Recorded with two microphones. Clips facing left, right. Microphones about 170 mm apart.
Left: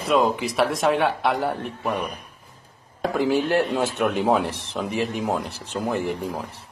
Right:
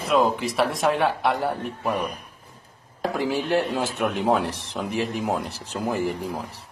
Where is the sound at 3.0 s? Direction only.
Centre (ahead or behind).